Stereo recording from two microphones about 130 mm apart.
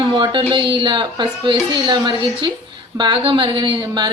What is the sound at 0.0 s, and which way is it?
A woman's voice, 35° right (ahead or behind).